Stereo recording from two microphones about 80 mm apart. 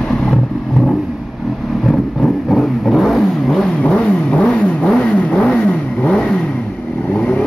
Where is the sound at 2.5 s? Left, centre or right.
Centre.